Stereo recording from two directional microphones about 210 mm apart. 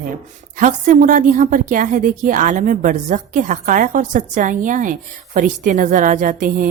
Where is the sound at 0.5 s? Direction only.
40° right (ahead or behind).